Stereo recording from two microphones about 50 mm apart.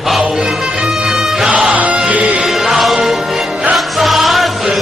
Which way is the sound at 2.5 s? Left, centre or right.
Centre.